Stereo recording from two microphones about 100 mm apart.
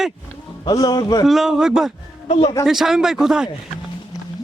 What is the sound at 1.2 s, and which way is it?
Speech, 5° right (ahead or behind).